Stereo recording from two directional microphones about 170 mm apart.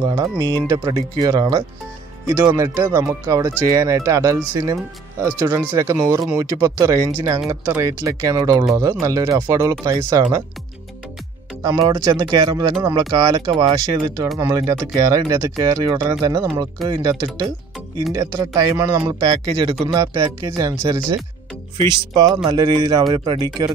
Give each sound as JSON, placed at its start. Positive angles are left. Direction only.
{"t": 0.0, "sound": "speech", "side_deg": -20}
{"t": 5.7, "sound": "speech", "side_deg": -20}
{"t": 11.6, "sound": "speech", "side_deg": -20}
{"t": 18.1, "sound": "speech", "side_deg": -20}